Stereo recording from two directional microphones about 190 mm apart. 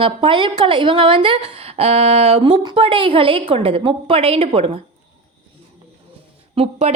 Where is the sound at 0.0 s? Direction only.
25° right (ahead or behind).